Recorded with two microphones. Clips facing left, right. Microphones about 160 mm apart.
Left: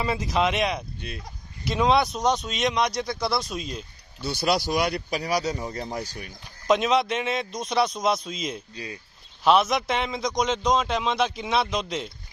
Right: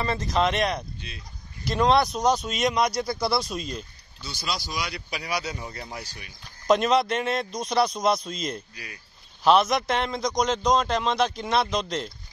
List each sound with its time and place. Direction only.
0.0 s a man's voice: 5° left (ahead or behind)
4.2 s speech: 60° left (ahead or behind); by 6.3 s 45° left (ahead or behind)
6.7 s a man's voice: centre (ahead or behind)
8.7 s speech: 25° left (ahead or behind)
9.4 s a man's voice: centre (ahead or behind)